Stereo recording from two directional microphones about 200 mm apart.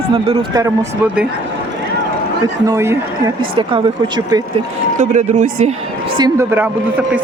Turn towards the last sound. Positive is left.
turn(degrees=-10)  # may be behind; listen again after turning